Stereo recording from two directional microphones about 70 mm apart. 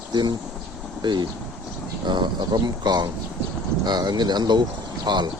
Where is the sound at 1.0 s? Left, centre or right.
Right.